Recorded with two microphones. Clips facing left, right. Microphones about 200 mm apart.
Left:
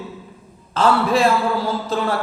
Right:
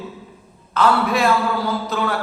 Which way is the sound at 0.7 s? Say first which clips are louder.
Left 1 dB; 30° left (ahead or behind).